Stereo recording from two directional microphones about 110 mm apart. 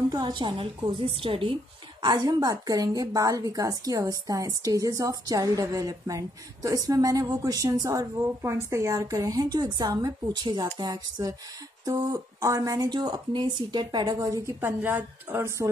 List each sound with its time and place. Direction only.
0.1 s a woman's voice: 40° right (ahead or behind)
14.8 s speech: 20° right (ahead or behind)